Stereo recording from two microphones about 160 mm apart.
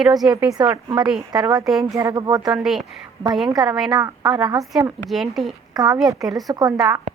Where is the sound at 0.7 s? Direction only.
20° right (ahead or behind).